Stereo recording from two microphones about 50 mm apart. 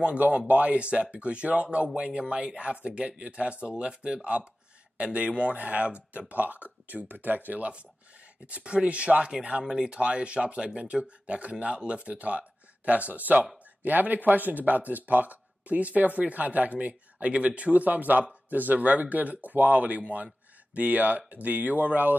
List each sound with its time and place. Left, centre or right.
0.5 s speech: right